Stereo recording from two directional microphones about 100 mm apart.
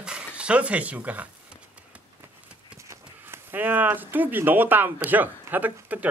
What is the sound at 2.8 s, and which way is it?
Speech, 25° right (ahead or behind).